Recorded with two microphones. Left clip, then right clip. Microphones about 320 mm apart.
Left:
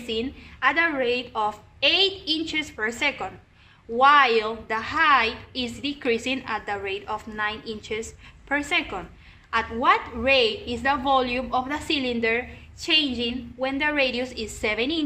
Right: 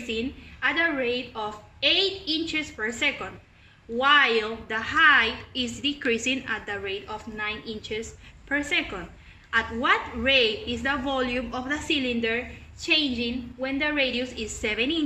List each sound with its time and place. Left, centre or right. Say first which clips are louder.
0.1 s a woman's voice: left 3 dB; centre